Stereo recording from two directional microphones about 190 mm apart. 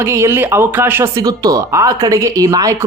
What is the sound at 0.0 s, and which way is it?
Speech, 15° right (ahead or behind).